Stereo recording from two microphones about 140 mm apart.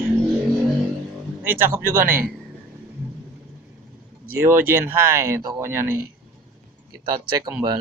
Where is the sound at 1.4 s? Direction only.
15° right (ahead or behind).